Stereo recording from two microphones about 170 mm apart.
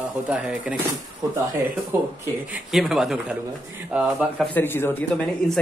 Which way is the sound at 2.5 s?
5° right (ahead or behind).